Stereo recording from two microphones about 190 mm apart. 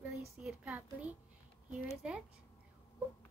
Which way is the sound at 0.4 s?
5° right (ahead or behind).